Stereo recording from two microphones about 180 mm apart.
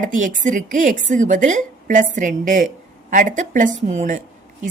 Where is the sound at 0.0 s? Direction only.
45° right (ahead or behind).